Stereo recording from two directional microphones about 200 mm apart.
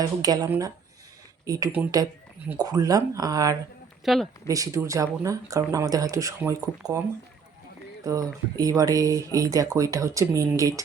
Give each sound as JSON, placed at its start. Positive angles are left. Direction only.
{"t": 0.0, "sound": "speech", "side_deg": -20}
{"t": 4.0, "sound": "speech", "side_deg": 0}
{"t": 4.4, "sound": "speech", "side_deg": -15}
{"t": 8.0, "sound": "speech", "side_deg": -20}